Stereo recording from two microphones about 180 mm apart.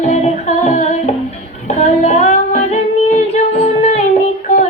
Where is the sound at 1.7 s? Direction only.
40° left (ahead or behind).